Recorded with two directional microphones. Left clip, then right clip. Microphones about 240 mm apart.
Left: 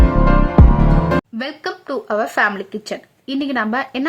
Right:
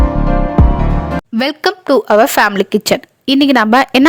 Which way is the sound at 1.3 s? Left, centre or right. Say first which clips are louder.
Right 10 dB; right.